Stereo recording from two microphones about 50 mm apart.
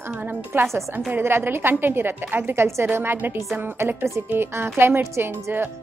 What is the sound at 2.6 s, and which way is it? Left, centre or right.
Speech, right.